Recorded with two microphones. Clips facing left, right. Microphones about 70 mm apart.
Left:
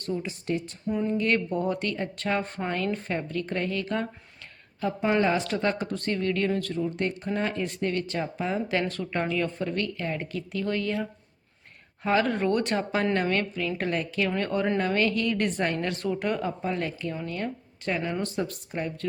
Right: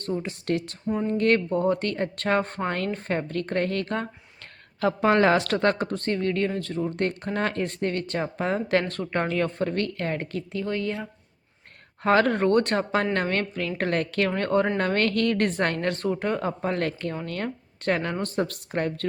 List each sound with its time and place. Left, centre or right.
0.0 s speech: right
0.3 s speech: right
0.9 s speech: right
1.2 s speech: right
4.8 s speech: right
6.0 s speech: right
6.9 s speech: right
10.5 s speech: right
12.0 s speech: right
14.3 s speech: right
14.8 s speech: right